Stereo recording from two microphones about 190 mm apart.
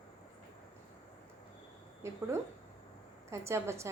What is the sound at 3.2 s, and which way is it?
Speech, 15° right (ahead or behind).